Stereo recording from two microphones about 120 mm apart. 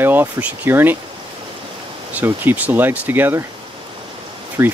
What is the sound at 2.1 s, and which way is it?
Speech, 15° right (ahead or behind).